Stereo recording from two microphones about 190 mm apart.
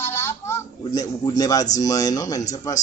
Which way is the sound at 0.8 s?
20° left (ahead or behind).